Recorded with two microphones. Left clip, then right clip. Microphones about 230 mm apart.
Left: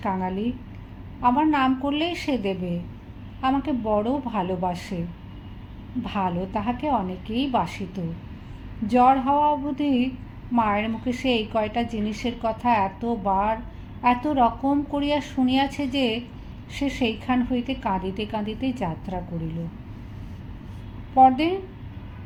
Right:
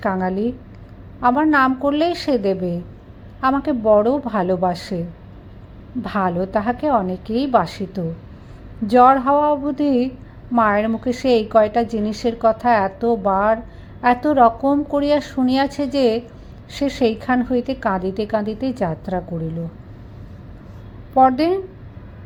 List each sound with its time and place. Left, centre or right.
0.0 s a woman's voice: right
6.0 s a woman's voice: right
21.2 s a woman's voice: right